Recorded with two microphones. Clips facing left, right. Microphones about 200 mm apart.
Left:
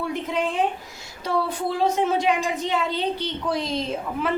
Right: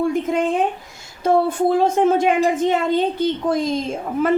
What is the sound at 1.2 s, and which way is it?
A woman's voice, 50° right (ahead or behind).